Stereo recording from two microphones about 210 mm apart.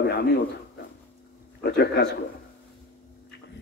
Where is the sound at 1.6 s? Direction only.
50° left (ahead or behind).